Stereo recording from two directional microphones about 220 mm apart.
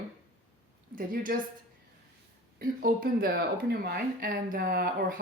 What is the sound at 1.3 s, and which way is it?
Speech, 40° right (ahead or behind).